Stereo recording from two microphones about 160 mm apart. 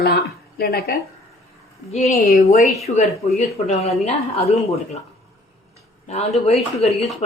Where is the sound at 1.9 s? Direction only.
45° left (ahead or behind).